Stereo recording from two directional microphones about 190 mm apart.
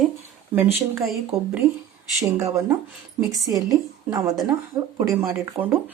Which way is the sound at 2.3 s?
15° right (ahead or behind).